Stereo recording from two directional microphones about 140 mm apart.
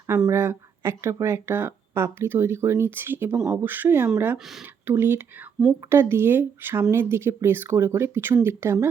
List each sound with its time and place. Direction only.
0.3 s speech: 20° right (ahead or behind)